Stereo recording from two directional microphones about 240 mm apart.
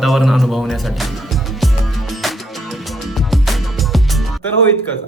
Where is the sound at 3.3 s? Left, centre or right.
Centre.